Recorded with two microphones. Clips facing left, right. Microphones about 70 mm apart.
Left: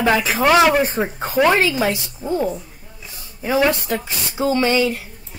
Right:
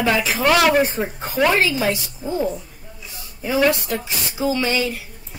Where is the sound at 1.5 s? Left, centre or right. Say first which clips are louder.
Left 2 dB; left.